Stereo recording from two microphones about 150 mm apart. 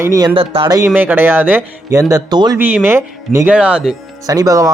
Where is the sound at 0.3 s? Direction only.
40° right (ahead or behind).